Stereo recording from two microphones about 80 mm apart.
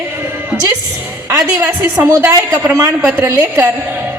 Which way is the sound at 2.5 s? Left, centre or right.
Right.